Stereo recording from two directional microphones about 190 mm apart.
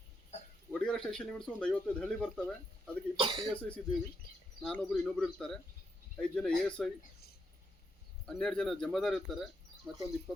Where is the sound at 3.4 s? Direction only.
5° left (ahead or behind).